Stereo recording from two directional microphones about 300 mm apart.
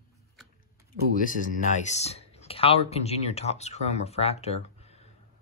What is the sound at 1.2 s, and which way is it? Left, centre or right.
Speech, left.